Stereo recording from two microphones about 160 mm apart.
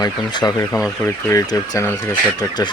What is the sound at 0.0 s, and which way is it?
Speech, 25° left (ahead or behind).